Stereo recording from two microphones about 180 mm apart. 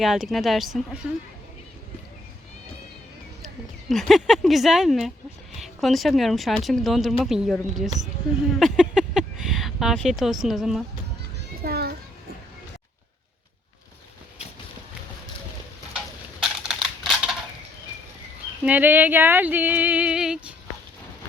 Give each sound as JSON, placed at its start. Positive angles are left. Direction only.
{"t": 0.0, "sound": "speech", "side_deg": 0}
{"t": 3.8, "sound": "speech", "side_deg": 0}
{"t": 8.5, "sound": "a sound", "side_deg": 0}
{"t": 11.3, "sound": "children playing", "side_deg": -60}
{"t": 16.4, "sound": "typing", "side_deg": 0}
{"t": 18.6, "sound": "speech", "side_deg": -10}